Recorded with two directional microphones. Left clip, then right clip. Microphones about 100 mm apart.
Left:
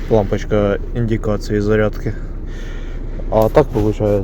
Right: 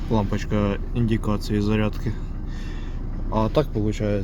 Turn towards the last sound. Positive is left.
turn(degrees=20)  # may be behind; listen again after turning